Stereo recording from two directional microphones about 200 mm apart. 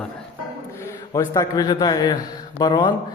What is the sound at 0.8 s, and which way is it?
A man's voice, 15° left (ahead or behind).